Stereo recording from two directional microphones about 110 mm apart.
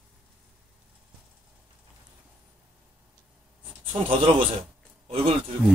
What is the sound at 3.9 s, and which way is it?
Speech, 50° right (ahead or behind).